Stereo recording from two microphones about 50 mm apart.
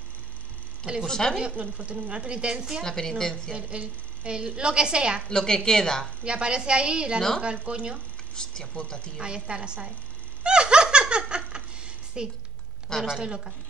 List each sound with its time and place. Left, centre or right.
1.0 s a woman's voice: centre
1.4 s a woman's voice: centre
2.8 s a woman's voice: centre
3.5 s a woman's voice: right
5.3 s a woman's voice: centre
6.2 s a woman's voice: centre
8.8 s a woman's voice: centre
9.2 s a woman's voice: centre
10.4 s giggle: centre
13.0 s a woman's voice: centre